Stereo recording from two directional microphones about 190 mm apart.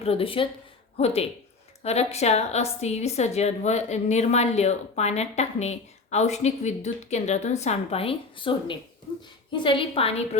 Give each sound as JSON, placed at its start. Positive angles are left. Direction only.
{"t": 0.0, "sound": "a woman's voice", "side_deg": 30}